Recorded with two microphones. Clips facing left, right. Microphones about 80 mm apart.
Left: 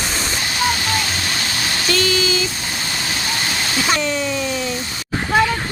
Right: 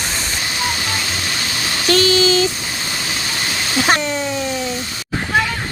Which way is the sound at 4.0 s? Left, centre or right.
Right.